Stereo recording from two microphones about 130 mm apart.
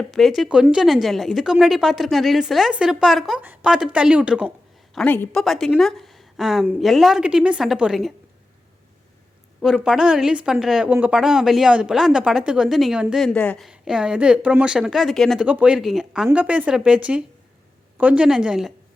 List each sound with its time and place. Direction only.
0.1 s speech: centre (ahead or behind)
5.0 s a woman's voice: 15° left (ahead or behind)
5.3 s a woman's voice: centre (ahead or behind)
9.6 s speech: centre (ahead or behind)
13.7 s speech: 5° right (ahead or behind)
15.4 s speech: 10° right (ahead or behind)